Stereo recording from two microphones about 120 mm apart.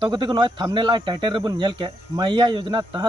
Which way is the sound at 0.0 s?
40° right (ahead or behind).